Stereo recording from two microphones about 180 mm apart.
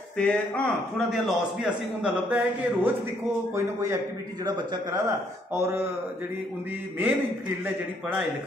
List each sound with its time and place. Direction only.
0.2 s a man's voice: 5° left (ahead or behind); by 5.9 s 15° right (ahead or behind)
7.0 s a man's voice: 10° right (ahead or behind)